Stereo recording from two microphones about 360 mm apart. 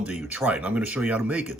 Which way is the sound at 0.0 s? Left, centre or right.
Centre.